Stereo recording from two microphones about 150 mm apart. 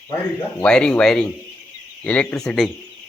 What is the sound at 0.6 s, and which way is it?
Speech, 5° left (ahead or behind).